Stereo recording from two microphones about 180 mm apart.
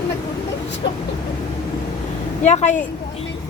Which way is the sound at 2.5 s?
40° left (ahead or behind).